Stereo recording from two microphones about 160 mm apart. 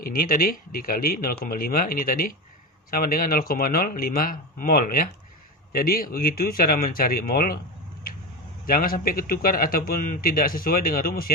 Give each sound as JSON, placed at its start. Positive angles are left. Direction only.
{"t": 0.0, "sound": "a man's voice", "side_deg": 65}
{"t": 8.6, "sound": "a man's voice", "side_deg": 65}